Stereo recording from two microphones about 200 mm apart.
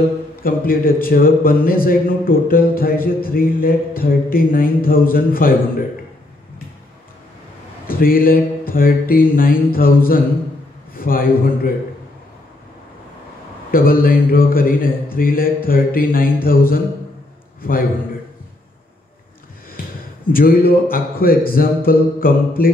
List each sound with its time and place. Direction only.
0.4 s speech: 45° left (ahead or behind)
7.8 s speech: 45° left (ahead or behind)
13.7 s a man's voice: 45° left (ahead or behind)
20.3 s speech: 45° left (ahead or behind)